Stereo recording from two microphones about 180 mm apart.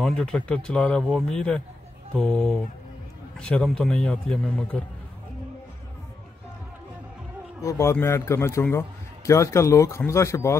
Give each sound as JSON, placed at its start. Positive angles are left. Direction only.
{"t": 0.0, "sound": "a man's voice", "side_deg": 5}
{"t": 7.6, "sound": "a man's voice", "side_deg": 15}